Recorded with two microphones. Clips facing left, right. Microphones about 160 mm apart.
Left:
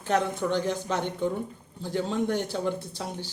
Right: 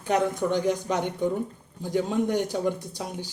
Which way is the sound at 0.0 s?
15° right (ahead or behind).